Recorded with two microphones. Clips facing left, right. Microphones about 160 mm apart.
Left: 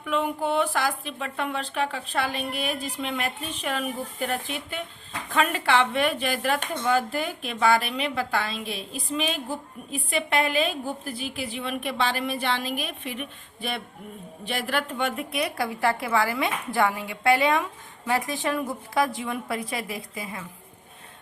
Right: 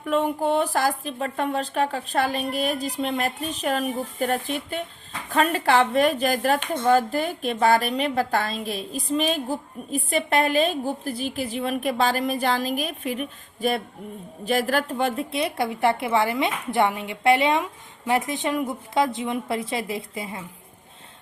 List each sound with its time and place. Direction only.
0.0 s a woman's voice: 40° right (ahead or behind)